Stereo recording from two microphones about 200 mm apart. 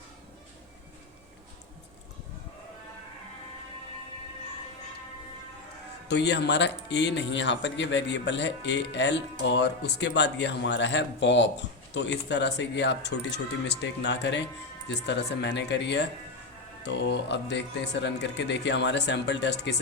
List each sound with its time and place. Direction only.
6.1 s speech: 60° left (ahead or behind)